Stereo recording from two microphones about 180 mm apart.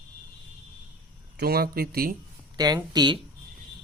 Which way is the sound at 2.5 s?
20° right (ahead or behind).